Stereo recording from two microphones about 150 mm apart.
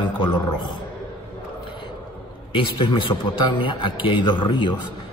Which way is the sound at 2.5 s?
35° left (ahead or behind).